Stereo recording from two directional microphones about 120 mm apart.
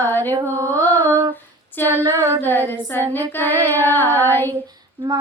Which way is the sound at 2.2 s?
15° left (ahead or behind).